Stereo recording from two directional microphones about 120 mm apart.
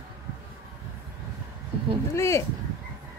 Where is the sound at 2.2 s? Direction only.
20° left (ahead or behind).